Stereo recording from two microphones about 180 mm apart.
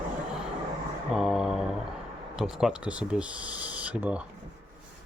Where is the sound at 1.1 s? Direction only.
Centre (ahead or behind).